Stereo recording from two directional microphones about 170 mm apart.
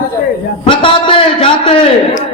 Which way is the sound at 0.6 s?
30° left (ahead or behind).